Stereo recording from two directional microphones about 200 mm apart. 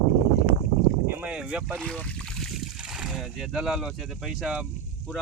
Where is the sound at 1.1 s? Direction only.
5° right (ahead or behind).